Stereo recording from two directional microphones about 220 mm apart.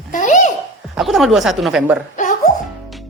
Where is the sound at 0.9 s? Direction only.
Centre (ahead or behind).